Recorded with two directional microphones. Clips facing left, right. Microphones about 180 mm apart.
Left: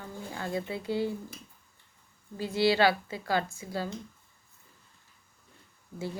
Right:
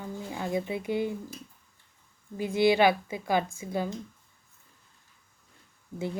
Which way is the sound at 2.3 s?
15° right (ahead or behind).